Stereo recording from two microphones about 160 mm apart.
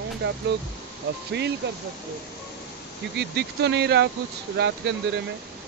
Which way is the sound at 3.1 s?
90° right.